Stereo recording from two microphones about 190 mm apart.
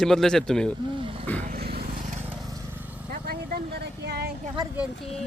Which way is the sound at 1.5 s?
55° right (ahead or behind).